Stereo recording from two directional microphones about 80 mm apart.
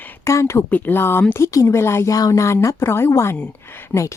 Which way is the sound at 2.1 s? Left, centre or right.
Left.